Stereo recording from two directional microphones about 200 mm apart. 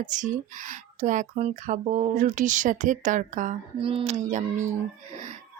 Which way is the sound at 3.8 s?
25° right (ahead or behind).